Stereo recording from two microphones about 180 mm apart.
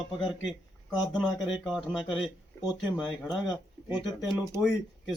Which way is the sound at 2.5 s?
15° left (ahead or behind).